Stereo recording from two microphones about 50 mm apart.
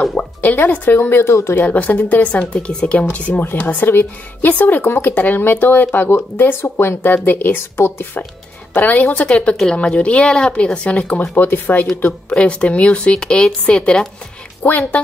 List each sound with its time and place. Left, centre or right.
0.2 s music: left
0.6 s speech: left
1.2 s speech: left
1.5 s speech: left
2.5 s speech: centre
3.6 s speech: left
11.3 s speech: left
12.3 s speech: left
14.6 s speech: left